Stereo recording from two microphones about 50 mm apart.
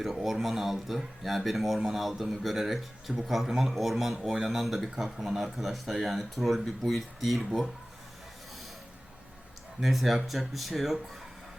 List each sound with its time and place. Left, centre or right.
0.0 s speech: centre
9.8 s speech: centre